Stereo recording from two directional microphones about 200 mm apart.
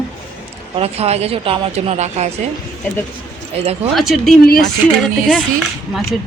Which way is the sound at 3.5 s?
30° right (ahead or behind).